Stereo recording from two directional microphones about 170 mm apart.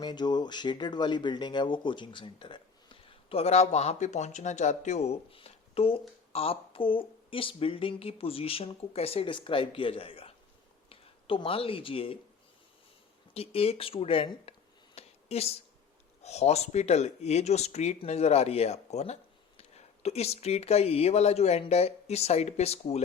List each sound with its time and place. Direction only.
0.0 s speech: 25° left (ahead or behind)
13.3 s speech: 35° left (ahead or behind)
14.9 s a sound: 35° left (ahead or behind)
16.2 s speech: 40° left (ahead or behind)